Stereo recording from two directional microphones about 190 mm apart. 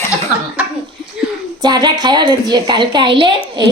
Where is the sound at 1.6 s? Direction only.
20° right (ahead or behind).